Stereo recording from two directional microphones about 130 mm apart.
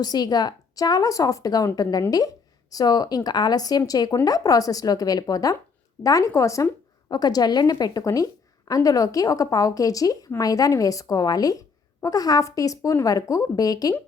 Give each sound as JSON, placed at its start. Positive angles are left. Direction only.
{"t": 0.0, "sound": "a woman's voice", "side_deg": 30}